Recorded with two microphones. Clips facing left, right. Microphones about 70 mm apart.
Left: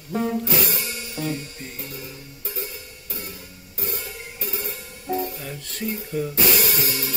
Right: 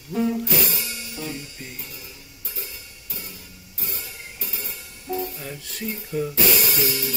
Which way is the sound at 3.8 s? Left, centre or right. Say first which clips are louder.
Left 5 dB; left.